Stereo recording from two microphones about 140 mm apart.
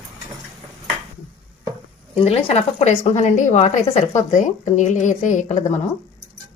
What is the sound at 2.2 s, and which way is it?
A woman's voice, 45° left (ahead or behind).